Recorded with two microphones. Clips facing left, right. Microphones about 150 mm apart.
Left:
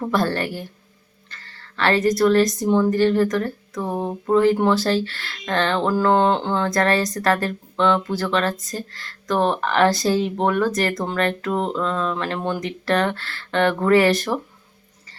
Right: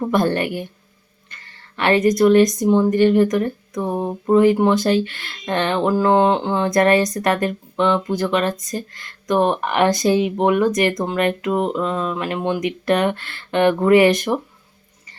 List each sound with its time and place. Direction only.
0.1 s a woman's voice: 20° right (ahead or behind)
6.7 s a woman's voice: 20° right (ahead or behind)
7.8 s speech: 5° right (ahead or behind)
8.0 s speech: 15° right (ahead or behind)